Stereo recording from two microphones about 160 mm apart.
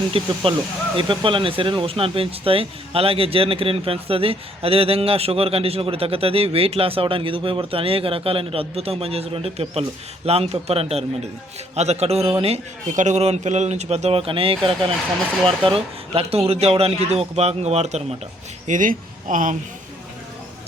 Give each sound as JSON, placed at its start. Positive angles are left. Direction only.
{"t": 0.1, "sound": "speech", "side_deg": -35}
{"t": 12.9, "sound": "a man's voice", "side_deg": -50}
{"t": 18.7, "sound": "speech", "side_deg": -55}